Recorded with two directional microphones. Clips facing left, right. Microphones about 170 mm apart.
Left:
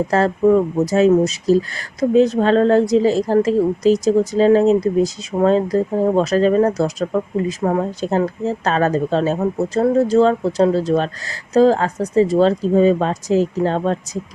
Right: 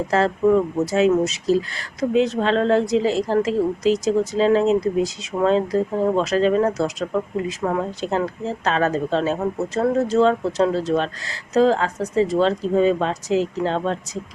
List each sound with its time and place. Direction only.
0.1 s speech: 40° left (ahead or behind)